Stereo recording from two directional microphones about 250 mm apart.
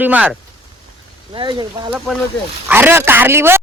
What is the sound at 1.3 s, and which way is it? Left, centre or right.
Speech, centre.